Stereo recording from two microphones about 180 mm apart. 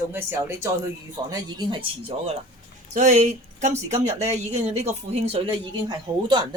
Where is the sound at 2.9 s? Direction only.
40° right (ahead or behind).